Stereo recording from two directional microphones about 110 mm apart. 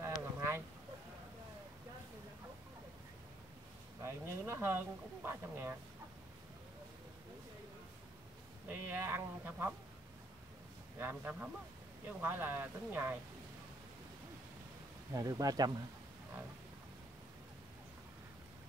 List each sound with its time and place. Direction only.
0.0 s boat: 25° right (ahead or behind)
4.0 s speech: 20° right (ahead or behind)
8.6 s speech: 20° right (ahead or behind)
11.0 s speech: 15° right (ahead or behind)
15.1 s speech: 35° right (ahead or behind)